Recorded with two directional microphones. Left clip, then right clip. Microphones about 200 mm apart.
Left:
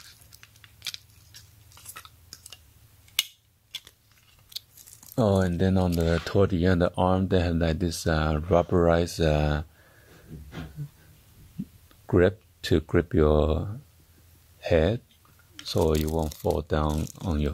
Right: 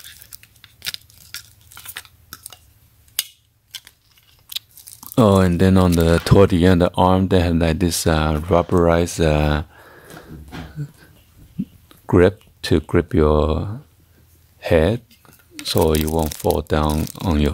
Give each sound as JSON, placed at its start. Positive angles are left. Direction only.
{"t": 4.5, "sound": "biting", "side_deg": -15}
{"t": 5.1, "sound": "speech", "side_deg": -15}
{"t": 11.9, "sound": "speech", "side_deg": -10}